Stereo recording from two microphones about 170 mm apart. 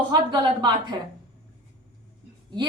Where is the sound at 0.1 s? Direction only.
25° right (ahead or behind).